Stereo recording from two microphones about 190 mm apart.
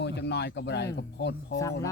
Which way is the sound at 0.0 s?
60° left (ahead or behind).